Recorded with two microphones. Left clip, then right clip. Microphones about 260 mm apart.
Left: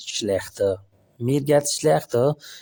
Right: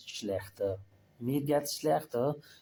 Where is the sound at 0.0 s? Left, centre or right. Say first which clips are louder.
Left 12 dB; left.